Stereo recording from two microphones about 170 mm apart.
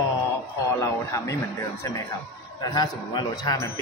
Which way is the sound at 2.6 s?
25° left (ahead or behind).